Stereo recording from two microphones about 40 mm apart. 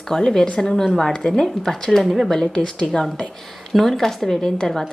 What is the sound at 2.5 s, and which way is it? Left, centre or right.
Speech, centre.